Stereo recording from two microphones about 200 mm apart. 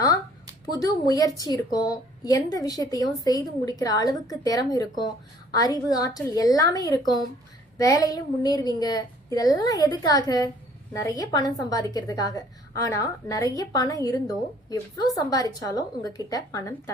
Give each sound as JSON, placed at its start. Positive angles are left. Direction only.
{"t": 0.6, "sound": "a woman's voice", "side_deg": 15}